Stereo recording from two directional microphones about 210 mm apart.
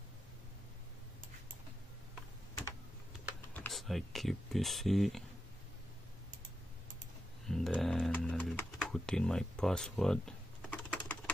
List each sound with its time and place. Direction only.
3.5 s speech: centre (ahead or behind)
7.4 s typing: centre (ahead or behind)